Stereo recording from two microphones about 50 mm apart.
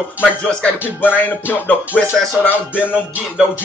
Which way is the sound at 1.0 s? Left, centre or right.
Left.